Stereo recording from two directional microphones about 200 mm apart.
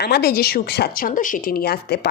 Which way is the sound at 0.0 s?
55° left (ahead or behind).